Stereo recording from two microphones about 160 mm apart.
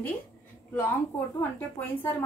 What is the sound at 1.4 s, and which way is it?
Speech, 10° left (ahead or behind).